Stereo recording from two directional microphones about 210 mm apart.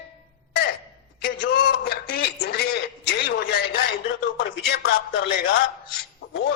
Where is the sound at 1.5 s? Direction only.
50° left (ahead or behind).